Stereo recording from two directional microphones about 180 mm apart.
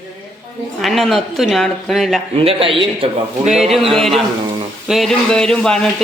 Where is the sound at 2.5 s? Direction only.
30° right (ahead or behind).